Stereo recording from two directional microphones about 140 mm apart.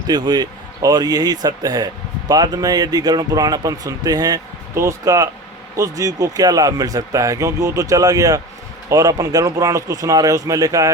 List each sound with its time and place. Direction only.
0.1 s speech: 30° right (ahead or behind)